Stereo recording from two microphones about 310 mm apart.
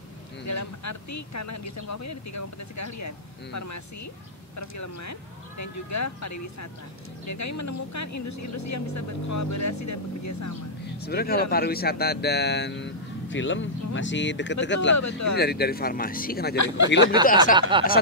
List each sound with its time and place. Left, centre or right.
0.5 s speech: left
11.0 s speech: left
15.0 s speech: left
15.3 s speech: left
16.5 s speech: left
17.6 s speech: centre